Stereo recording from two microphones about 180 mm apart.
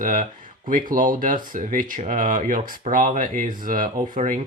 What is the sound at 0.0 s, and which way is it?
Speech, 50° right (ahead or behind).